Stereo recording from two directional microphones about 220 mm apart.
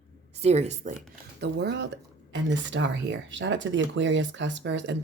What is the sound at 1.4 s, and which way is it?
Speech, 50° right (ahead or behind).